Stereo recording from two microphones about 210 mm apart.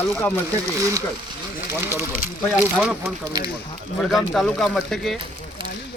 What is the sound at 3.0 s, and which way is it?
Speech, 20° right (ahead or behind).